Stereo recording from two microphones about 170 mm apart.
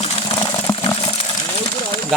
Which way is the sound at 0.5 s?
15° left (ahead or behind).